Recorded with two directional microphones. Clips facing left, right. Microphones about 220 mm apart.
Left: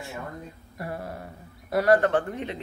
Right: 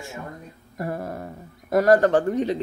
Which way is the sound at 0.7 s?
45° right (ahead or behind).